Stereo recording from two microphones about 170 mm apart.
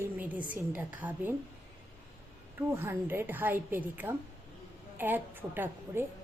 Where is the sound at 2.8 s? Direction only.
15° right (ahead or behind).